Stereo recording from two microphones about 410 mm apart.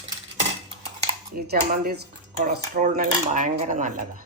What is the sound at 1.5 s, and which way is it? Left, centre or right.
Speech, right.